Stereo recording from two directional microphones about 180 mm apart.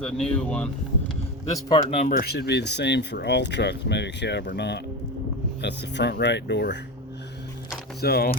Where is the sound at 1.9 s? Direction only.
45° left (ahead or behind); by 6.8 s 70° left (ahead or behind).